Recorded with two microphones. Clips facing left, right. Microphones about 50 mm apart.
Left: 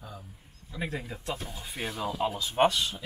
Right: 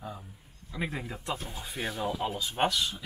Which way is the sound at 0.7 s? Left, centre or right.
Centre.